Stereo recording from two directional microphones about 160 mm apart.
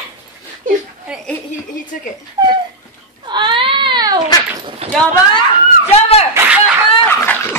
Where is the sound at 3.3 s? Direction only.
30° right (ahead or behind).